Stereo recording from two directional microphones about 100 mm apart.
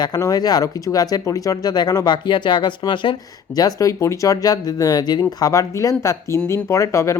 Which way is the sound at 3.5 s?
35° left (ahead or behind).